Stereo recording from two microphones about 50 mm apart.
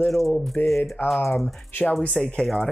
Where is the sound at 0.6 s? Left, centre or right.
Left.